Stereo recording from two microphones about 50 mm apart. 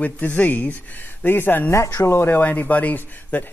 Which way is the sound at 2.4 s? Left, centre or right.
Left.